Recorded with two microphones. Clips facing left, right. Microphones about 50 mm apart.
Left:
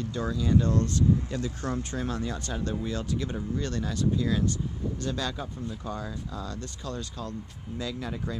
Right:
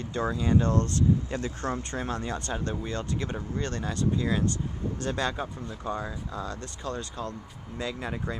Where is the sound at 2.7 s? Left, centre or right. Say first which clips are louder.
Left 1 dB; centre.